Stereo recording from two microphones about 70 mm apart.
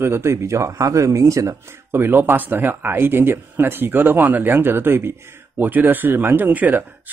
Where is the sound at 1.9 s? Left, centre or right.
Right.